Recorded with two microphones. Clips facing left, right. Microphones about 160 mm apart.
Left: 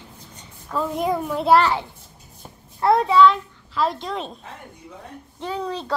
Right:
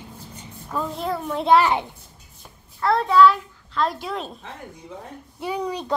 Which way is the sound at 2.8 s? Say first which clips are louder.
Left 3 dB; 20° left (ahead or behind).